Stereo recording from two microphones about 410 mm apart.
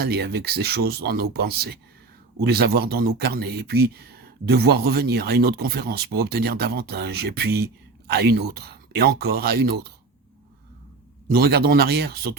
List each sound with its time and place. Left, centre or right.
0.0 s speech: right
11.3 s speech: right